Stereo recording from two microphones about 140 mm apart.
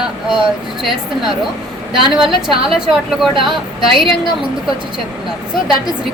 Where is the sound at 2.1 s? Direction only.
5° right (ahead or behind).